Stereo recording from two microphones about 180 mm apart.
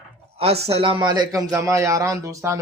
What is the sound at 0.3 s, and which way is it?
A man's voice, 35° right (ahead or behind).